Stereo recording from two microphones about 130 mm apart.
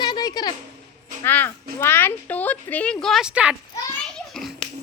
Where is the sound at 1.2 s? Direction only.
15° left (ahead or behind); by 3.6 s 10° right (ahead or behind).